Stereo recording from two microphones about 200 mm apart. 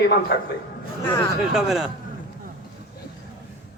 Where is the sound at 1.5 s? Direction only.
Centre (ahead or behind).